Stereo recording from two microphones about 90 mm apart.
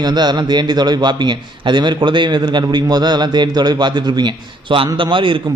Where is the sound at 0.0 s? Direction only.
55° right (ahead or behind).